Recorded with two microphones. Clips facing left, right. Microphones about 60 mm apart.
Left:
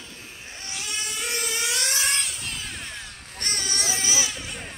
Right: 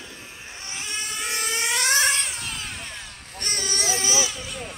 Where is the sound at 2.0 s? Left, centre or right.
Centre.